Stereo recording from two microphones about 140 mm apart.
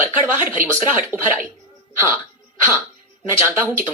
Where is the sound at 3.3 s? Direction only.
15° right (ahead or behind).